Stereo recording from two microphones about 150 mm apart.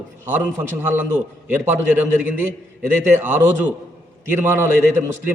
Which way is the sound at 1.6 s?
15° right (ahead or behind).